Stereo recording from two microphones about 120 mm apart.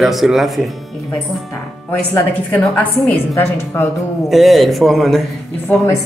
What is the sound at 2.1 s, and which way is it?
A woman's voice, 15° left (ahead or behind).